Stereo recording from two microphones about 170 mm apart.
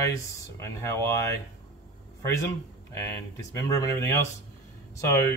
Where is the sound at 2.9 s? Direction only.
15° left (ahead or behind).